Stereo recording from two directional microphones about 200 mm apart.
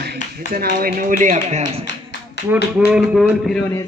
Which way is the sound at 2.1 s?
60° left (ahead or behind).